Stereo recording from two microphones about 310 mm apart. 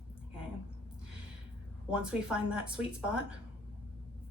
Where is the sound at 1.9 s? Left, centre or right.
Centre.